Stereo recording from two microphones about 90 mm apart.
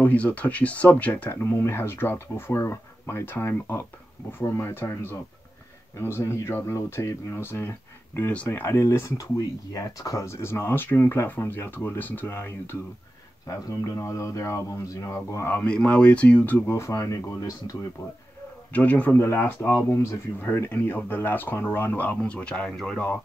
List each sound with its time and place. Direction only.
0.0 s speech: 15° left (ahead or behind)
13.7 s speech: 40° left (ahead or behind)
15.4 s speech: 15° left (ahead or behind); by 17.5 s 40° left (ahead or behind)
18.7 s a man's voice: 15° left (ahead or behind)